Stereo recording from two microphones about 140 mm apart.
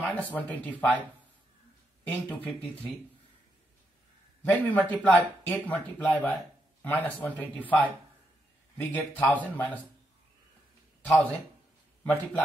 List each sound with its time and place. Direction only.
0.0 s speech: 10° left (ahead or behind)
2.0 s speech: 10° left (ahead or behind)
4.4 s speech: 15° left (ahead or behind)
8.9 s speech: 10° left (ahead or behind)
11.1 s speech: 10° left (ahead or behind)